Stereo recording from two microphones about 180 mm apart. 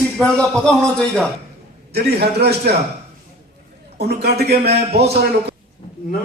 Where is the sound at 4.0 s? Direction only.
65° right (ahead or behind).